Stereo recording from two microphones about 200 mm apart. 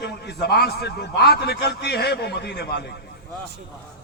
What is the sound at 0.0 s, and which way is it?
A man's voice, 55° left (ahead or behind).